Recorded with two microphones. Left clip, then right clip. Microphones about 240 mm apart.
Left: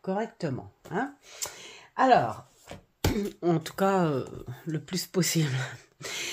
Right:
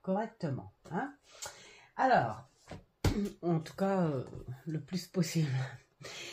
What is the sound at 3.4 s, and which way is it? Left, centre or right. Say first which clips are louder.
Speech: left 9 dB; left.